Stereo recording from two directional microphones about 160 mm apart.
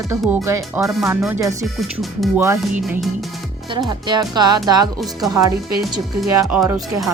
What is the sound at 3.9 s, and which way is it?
Speech, 25° right (ahead or behind).